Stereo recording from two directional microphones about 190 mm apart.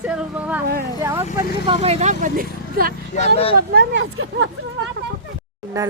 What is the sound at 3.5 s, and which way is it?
Speech, 55° right (ahead or behind).